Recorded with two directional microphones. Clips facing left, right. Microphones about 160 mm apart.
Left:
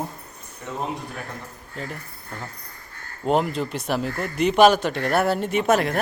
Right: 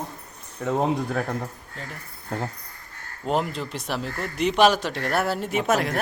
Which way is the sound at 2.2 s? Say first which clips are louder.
Right 7 dB; 40° right (ahead or behind).